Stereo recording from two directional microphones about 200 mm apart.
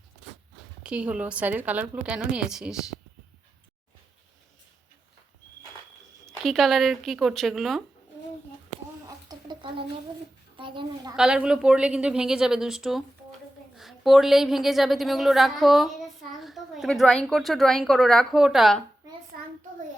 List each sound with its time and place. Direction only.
0.8 s a woman's voice: 5° right (ahead or behind)
6.2 s a woman's voice: centre (ahead or behind)
9.0 s a sound: 20° right (ahead or behind)
10.6 s a child's voice: 25° right (ahead or behind)
11.2 s a woman's voice: 5° right (ahead or behind)